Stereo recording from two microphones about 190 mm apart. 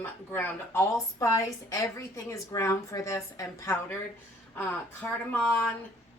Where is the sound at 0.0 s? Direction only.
10° left (ahead or behind).